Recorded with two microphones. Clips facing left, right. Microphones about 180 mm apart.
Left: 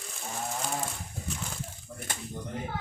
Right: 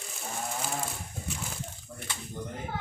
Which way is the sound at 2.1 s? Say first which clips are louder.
Left 2 dB; 50° left (ahead or behind).